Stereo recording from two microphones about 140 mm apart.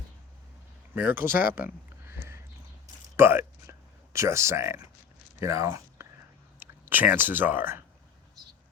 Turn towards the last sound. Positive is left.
turn(degrees=-15)  # may be behind; listen again after turning